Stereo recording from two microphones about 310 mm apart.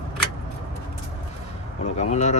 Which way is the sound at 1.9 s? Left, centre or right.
Left.